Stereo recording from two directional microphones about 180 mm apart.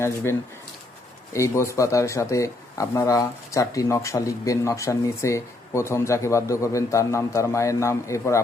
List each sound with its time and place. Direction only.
0.0 s speech: 15° left (ahead or behind)